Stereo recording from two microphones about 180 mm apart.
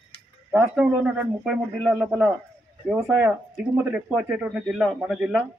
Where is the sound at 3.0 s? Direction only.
15° right (ahead or behind).